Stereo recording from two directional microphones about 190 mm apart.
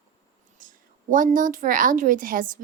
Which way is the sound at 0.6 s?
45° right (ahead or behind).